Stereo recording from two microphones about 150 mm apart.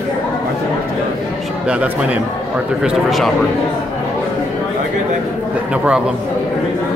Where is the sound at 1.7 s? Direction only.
10° right (ahead or behind).